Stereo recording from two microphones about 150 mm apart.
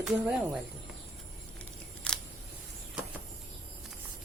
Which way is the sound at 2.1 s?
5° left (ahead or behind).